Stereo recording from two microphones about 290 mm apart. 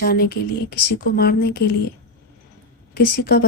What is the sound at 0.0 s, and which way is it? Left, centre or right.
Speech, left.